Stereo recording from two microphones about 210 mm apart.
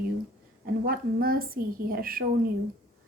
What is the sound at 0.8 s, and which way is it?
A woman's voice, 45° right (ahead or behind).